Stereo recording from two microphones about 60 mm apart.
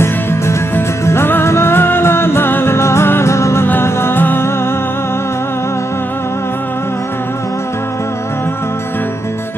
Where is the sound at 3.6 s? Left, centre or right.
Left.